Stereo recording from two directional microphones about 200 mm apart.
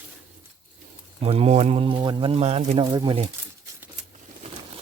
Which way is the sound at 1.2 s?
30° right (ahead or behind).